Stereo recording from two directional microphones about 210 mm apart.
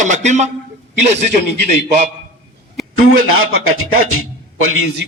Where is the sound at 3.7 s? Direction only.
90° right.